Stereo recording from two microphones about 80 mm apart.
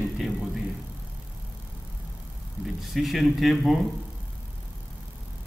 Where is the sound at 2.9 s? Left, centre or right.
Centre.